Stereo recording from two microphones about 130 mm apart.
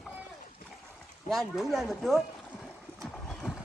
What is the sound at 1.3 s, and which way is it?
Speech, centre (ahead or behind).